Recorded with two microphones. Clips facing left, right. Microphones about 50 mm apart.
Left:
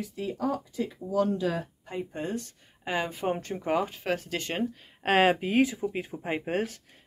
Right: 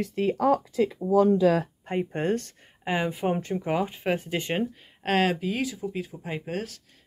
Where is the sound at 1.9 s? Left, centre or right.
Right.